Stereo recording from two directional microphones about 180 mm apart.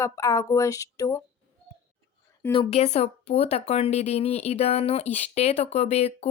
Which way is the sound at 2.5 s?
35° left (ahead or behind).